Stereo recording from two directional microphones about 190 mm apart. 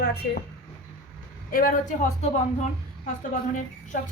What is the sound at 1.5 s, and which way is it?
A woman's voice, 50° left (ahead or behind).